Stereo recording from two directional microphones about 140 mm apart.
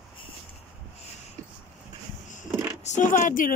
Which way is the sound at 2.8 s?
60° left (ahead or behind).